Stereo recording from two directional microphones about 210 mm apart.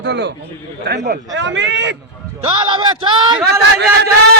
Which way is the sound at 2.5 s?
25° right (ahead or behind).